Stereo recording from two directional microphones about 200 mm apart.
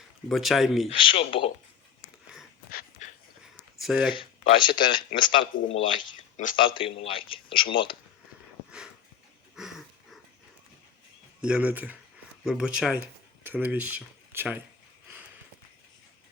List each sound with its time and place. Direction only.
0.3 s speech: centre (ahead or behind)
0.9 s speech: 25° left (ahead or behind)
2.6 s dog: 45° left (ahead or behind)
3.8 s speech: centre (ahead or behind)
4.1 s speech: 25° left (ahead or behind)
9.6 s dog: centre (ahead or behind)
11.3 s speech: 5° right (ahead or behind)